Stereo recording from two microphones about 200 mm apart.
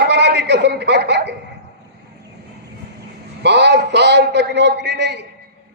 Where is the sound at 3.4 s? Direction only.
55° right (ahead or behind).